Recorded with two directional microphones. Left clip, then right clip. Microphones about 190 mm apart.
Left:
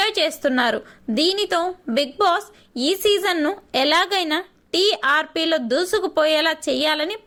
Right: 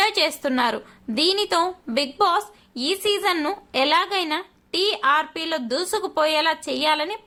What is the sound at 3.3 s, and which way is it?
Speech, 5° left (ahead or behind).